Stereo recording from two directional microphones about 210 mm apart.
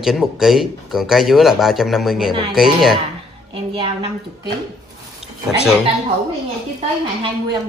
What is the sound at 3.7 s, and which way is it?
Speech, 25° right (ahead or behind).